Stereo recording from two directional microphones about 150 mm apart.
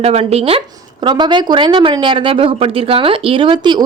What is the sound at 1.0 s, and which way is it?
A woman's voice, 30° right (ahead or behind).